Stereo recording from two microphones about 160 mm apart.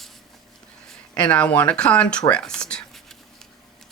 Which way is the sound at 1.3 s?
10° left (ahead or behind).